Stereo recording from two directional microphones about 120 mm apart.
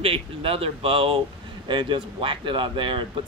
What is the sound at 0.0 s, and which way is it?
Speech, 50° right (ahead or behind).